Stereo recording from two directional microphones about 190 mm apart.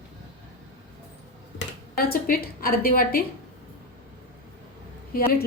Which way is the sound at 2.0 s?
50° left (ahead or behind).